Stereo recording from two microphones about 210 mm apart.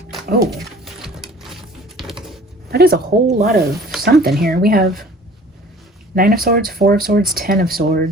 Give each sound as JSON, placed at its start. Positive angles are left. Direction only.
{"t": 1.0, "sound": "a sound", "side_deg": 0}
{"t": 2.6, "sound": "speech", "side_deg": -50}
{"t": 6.1, "sound": "speech", "side_deg": -45}